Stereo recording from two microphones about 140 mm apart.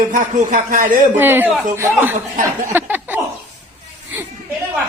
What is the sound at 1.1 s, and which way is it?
Speech, 15° right (ahead or behind).